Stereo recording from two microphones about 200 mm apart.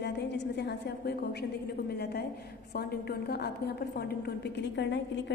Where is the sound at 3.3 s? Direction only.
55° left (ahead or behind).